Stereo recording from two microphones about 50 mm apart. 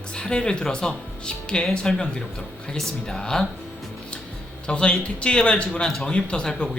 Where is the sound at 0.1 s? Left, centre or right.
Centre.